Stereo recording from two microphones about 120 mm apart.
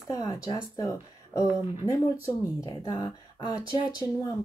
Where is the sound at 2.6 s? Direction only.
30° left (ahead or behind).